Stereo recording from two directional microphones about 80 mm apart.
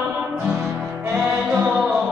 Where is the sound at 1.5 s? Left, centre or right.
Centre.